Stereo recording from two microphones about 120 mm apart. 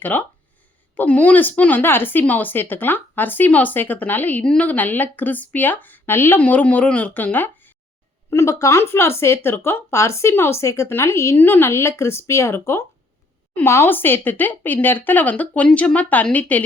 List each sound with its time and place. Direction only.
0.0 s speech: 15° left (ahead or behind)